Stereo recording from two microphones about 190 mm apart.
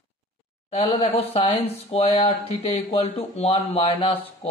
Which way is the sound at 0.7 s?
35° left (ahead or behind).